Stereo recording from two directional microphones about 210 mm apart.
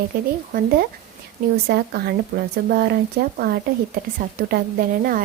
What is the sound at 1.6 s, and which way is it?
A woman's voice, 50° right (ahead or behind).